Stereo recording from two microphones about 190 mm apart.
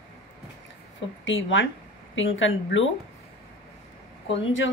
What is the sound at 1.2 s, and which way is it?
A woman's voice, 85° left.